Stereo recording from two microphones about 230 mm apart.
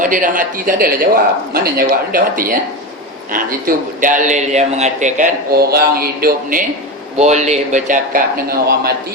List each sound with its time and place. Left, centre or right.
0.0 s a man's voice: right